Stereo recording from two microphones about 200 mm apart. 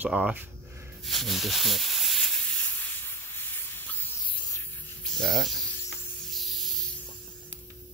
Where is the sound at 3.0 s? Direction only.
10° left (ahead or behind).